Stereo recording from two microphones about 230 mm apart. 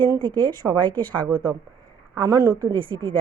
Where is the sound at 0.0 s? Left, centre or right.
Centre.